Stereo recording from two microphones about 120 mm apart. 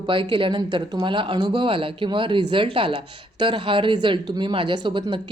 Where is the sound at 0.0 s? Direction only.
45° right (ahead or behind).